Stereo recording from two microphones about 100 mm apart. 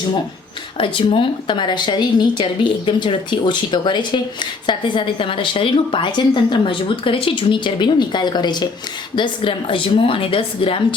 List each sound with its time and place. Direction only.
0.8 s speech: 60° left (ahead or behind)